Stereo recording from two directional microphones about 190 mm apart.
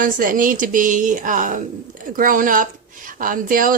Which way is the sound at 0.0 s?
45° right (ahead or behind).